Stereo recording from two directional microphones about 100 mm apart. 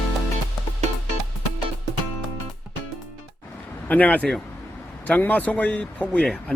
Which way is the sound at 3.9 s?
15° left (ahead or behind).